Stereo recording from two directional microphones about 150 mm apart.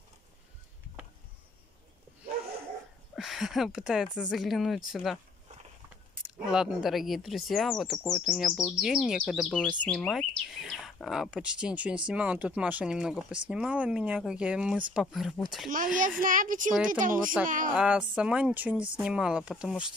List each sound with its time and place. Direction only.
3.2 s speech: centre (ahead or behind)
6.5 s speech: 5° right (ahead or behind)
9.5 s speech: 5° left (ahead or behind)
15.7 s speech: 60° right (ahead or behind)
16.7 s speech: 5° right (ahead or behind)
17.0 s speech: 65° right (ahead or behind)
17.7 s speech: 5° right (ahead or behind)